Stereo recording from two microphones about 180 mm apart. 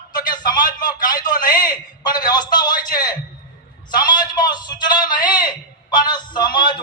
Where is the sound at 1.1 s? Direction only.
50° left (ahead or behind).